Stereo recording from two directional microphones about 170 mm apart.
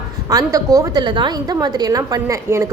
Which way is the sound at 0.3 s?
20° right (ahead or behind).